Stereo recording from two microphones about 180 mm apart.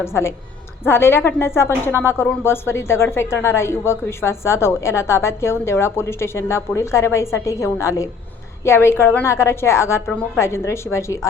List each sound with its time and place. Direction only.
0.0 s a woman's voice: 15° left (ahead or behind)